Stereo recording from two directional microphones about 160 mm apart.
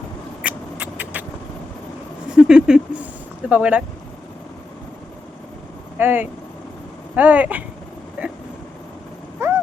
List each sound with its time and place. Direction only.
0.4 s a sound: 10° right (ahead or behind)
2.3 s speech: 5° right (ahead or behind)
6.0 s speech: 15° right (ahead or behind)
8.2 s vehicle: 10° right (ahead or behind)
9.4 s vehicle: 15° right (ahead or behind)